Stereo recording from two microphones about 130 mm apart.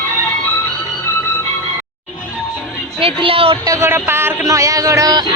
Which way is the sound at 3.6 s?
25° right (ahead or behind).